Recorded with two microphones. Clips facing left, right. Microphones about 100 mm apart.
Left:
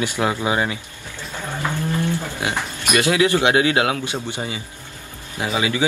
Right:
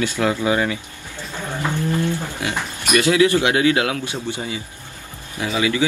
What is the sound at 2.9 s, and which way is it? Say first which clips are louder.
Speech: right 2 dB; 20° left (ahead or behind).